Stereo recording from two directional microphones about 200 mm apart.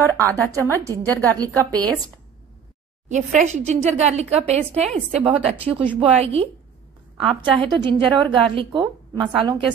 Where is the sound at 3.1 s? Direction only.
35° right (ahead or behind).